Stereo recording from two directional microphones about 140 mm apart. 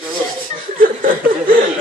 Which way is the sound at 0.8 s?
85° right.